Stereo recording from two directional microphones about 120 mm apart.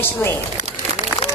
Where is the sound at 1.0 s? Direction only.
70° left (ahead or behind).